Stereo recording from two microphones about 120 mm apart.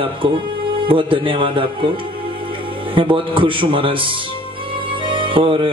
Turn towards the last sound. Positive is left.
turn(degrees=-45)  # may be behind; listen again after turning